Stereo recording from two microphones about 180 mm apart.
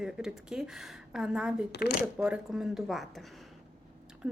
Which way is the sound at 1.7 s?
65° left (ahead or behind).